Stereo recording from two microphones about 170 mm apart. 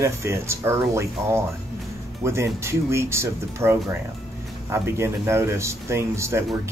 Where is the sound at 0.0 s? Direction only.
15° right (ahead or behind).